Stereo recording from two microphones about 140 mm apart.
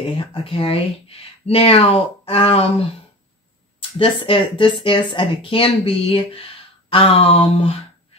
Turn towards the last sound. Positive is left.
turn(degrees=45)  # may be behind; listen again after turning